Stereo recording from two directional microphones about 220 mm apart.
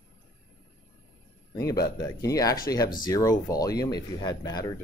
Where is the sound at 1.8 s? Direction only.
15° left (ahead or behind).